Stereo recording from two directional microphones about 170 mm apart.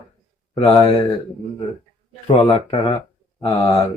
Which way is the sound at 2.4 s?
35° left (ahead or behind).